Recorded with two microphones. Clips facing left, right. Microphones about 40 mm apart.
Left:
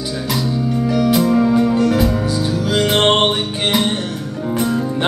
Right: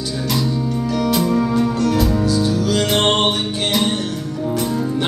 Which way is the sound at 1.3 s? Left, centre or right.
Centre.